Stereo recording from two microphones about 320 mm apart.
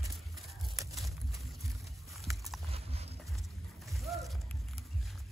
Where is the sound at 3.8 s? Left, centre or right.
Centre.